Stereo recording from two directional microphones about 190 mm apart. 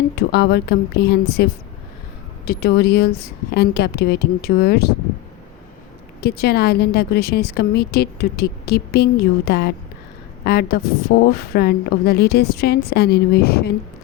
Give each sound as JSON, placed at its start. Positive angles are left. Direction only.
{"t": 0.2, "sound": "a woman's voice", "side_deg": 60}
{"t": 6.2, "sound": "a woman's voice", "side_deg": 55}